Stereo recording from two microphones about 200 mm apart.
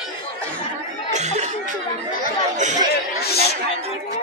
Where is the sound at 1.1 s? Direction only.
35° right (ahead or behind).